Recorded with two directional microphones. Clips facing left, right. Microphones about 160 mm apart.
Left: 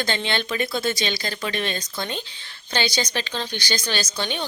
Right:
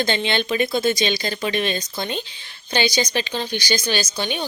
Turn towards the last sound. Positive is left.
turn(degrees=-10)  # may be behind; listen again after turning